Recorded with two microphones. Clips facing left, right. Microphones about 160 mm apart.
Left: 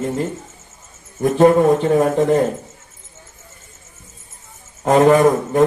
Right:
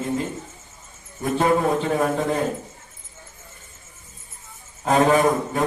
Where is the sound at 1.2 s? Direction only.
45° left (ahead or behind).